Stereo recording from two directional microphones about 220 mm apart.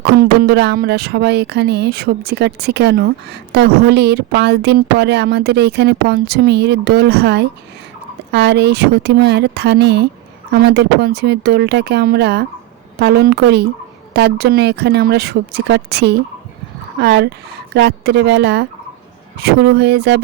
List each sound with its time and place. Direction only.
0.0 s speech: 50° right (ahead or behind)